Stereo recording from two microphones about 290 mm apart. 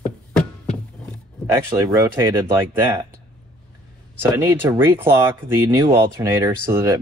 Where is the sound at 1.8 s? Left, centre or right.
Centre.